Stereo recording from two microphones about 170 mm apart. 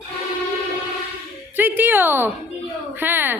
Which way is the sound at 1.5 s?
10° right (ahead or behind).